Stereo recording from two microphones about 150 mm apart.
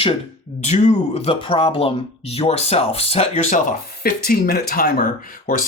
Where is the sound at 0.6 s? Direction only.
50° left (ahead or behind); by 5.0 s 75° left (ahead or behind).